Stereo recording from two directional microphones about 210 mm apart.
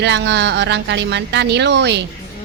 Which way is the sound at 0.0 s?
55° right (ahead or behind).